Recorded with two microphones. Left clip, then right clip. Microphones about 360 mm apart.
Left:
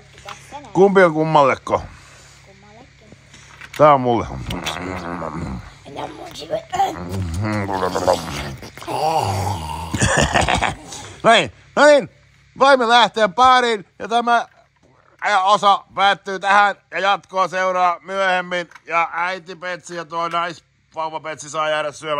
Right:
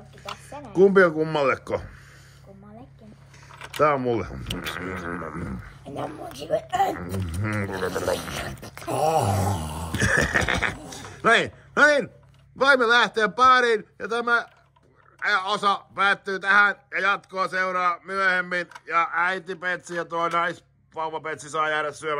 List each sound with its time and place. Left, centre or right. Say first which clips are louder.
0.2 s speech: left 3 dB; centre
3.7 s a man's voice: left 9 dB; centre